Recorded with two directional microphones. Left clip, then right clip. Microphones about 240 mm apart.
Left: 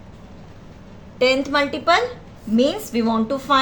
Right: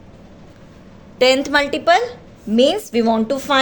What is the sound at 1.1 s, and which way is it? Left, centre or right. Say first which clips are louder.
A woman's voice: right 3 dB; right.